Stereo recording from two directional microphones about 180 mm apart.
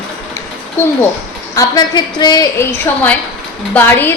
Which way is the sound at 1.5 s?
20° left (ahead or behind).